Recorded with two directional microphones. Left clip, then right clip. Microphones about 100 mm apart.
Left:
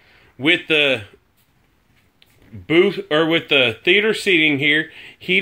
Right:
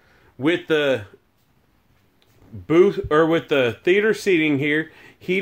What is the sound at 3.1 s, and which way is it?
Speech, 25° right (ahead or behind).